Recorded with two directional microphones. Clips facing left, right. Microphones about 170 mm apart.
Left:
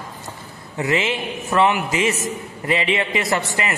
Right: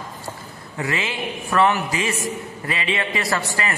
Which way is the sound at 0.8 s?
25° left (ahead or behind).